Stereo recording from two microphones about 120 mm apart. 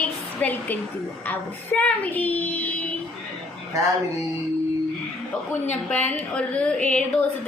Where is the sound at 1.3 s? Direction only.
10° left (ahead or behind).